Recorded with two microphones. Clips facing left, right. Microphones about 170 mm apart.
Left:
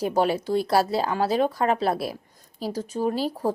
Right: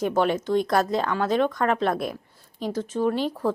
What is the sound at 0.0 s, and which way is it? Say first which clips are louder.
A woman's voice: even; 35° left (ahead or behind).